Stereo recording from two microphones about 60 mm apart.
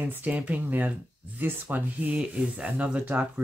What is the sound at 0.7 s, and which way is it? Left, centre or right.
Speech, right.